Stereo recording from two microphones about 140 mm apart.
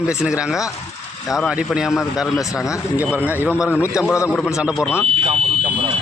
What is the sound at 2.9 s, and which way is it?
Speech, 10° right (ahead or behind).